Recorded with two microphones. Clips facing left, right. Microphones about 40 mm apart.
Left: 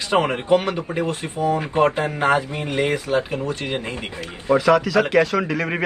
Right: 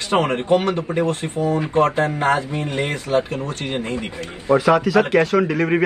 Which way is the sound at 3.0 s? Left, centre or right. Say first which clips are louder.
Right 1 dB; right.